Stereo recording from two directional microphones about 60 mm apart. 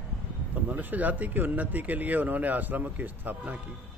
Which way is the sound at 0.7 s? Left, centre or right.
Right.